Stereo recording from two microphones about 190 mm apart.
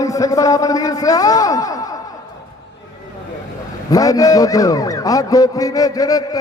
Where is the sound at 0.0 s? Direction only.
20° left (ahead or behind).